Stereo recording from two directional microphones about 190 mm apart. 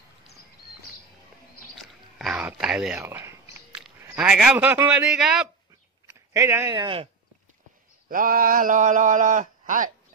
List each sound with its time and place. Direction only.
1.8 s a sound: centre (ahead or behind)
3.0 s speech: 15° right (ahead or behind)
6.0 s speech: 15° right (ahead or behind)
8.1 s speech: 45° right (ahead or behind)